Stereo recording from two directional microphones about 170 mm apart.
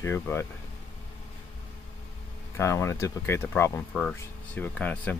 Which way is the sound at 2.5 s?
15° left (ahead or behind).